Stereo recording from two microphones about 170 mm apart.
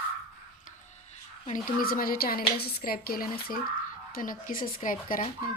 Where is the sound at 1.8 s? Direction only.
60° left (ahead or behind).